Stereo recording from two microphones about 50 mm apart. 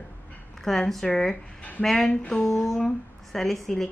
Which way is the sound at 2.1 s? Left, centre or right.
Left.